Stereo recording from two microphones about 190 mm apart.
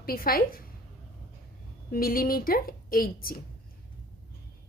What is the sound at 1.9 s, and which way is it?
A woman's voice, 50° left (ahead or behind).